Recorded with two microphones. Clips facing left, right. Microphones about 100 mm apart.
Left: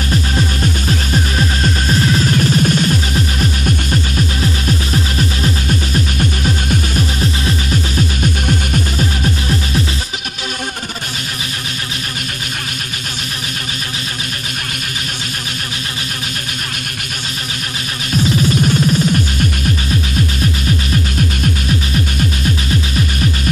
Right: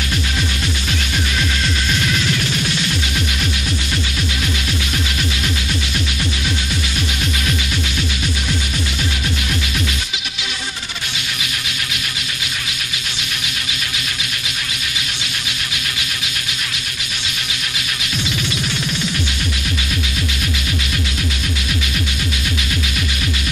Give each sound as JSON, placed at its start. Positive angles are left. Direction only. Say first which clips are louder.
{"t": 0.1, "sound": "music", "louder": "left 7 dB", "side_deg": 40}
{"t": 18.1, "sound": "music", "louder": "left 10 dB", "side_deg": 40}
{"t": 22.4, "sound": "music", "louder": "left 5 dB", "side_deg": 35}